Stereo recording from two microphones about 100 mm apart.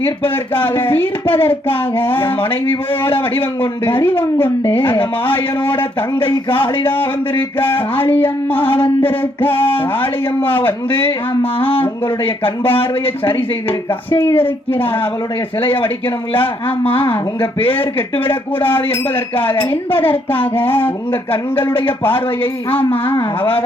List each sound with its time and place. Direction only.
0.0 s speech: 20° left (ahead or behind)
4.7 s speech: 20° left (ahead or behind)
6.8 s speech: 20° left (ahead or behind)
8.7 s mantra: 65° left (ahead or behind)
9.0 s speech: 20° left (ahead or behind)
14.3 s speech: 20° left (ahead or behind)